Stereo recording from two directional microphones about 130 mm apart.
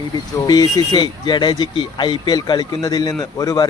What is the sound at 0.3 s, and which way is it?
Speech, 30° left (ahead or behind).